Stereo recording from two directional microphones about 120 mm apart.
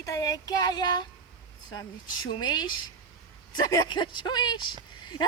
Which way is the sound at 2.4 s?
35° left (ahead or behind).